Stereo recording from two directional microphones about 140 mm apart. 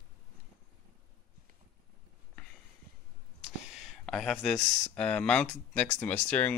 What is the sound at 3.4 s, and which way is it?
Speech, centre (ahead or behind).